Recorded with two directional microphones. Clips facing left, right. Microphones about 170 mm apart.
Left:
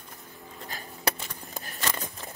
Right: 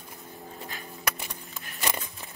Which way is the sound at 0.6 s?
40° left (ahead or behind).